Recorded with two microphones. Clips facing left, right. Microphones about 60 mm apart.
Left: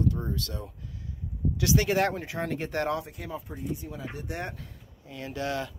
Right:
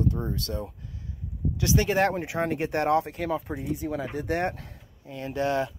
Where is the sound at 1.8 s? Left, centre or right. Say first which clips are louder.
Right 2 dB; right.